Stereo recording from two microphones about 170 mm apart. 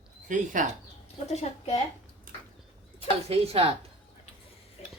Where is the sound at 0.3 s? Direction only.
50° right (ahead or behind).